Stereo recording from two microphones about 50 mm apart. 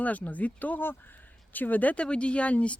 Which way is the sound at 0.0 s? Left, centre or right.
Left.